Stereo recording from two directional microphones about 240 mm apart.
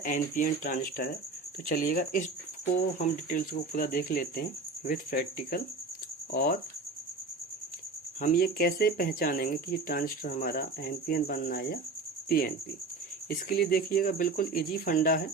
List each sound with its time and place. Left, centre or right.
0.0 s speech: left
8.2 s speech: left